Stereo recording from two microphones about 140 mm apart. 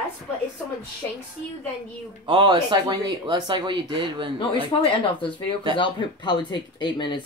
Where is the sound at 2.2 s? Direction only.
35° right (ahead or behind).